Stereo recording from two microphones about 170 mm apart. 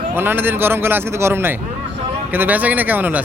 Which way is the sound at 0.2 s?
10° right (ahead or behind).